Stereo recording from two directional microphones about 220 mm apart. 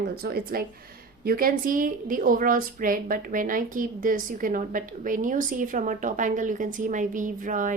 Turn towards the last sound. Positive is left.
turn(degrees=-35)  # may be behind; listen again after turning